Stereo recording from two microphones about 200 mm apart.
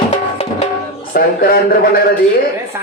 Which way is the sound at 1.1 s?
50° left (ahead or behind).